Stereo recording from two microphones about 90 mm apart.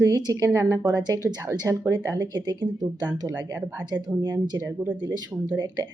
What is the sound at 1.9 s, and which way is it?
Speech, 45° right (ahead or behind).